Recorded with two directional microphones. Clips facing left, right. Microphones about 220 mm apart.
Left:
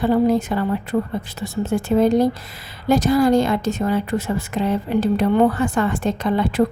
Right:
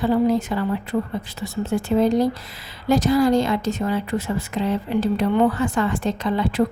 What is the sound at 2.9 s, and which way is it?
A woman's voice, 50° left (ahead or behind).